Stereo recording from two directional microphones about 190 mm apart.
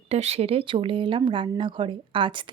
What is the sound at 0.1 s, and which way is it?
Speech, 35° right (ahead or behind).